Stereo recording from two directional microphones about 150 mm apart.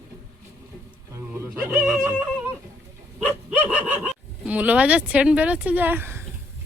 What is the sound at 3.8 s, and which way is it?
Speech, 10° right (ahead or behind).